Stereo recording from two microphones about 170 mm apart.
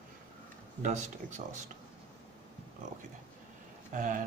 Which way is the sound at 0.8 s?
45° right (ahead or behind).